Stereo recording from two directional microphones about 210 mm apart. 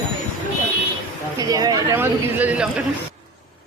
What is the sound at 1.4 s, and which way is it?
Speech, 20° right (ahead or behind).